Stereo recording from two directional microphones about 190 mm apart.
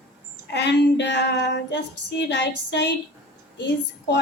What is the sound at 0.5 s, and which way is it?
A woman's voice, 65° left (ahead or behind).